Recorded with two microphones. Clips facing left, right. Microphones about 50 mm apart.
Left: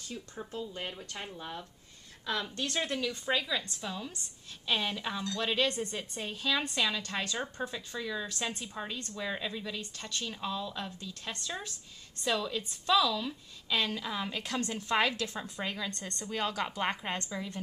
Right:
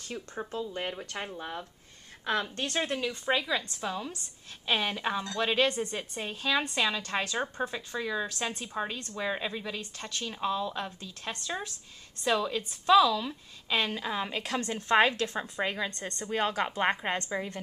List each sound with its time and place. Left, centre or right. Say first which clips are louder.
0.1 s a woman's voice: right 5 dB; right
8.4 s speech: right 2 dB; right
8.6 s a woman's voice: right 5 dB; right